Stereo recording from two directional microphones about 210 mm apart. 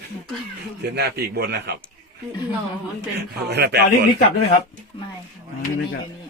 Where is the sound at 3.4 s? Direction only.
50° right (ahead or behind).